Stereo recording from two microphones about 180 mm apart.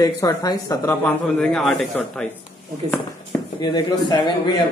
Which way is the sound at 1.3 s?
Centre (ahead or behind).